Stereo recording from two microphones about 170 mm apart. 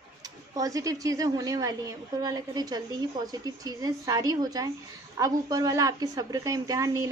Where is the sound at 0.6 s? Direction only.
20° right (ahead or behind).